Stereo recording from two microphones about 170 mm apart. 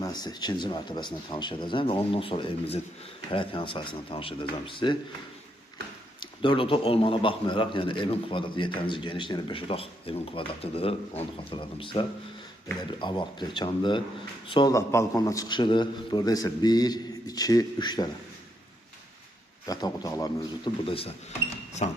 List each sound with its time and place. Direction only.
0.0 s a man's voice: 25° left (ahead or behind)
6.1 s a man's voice: 30° left (ahead or behind)
19.6 s a man's voice: 20° left (ahead or behind)
20.8 s a man's voice: 35° left (ahead or behind)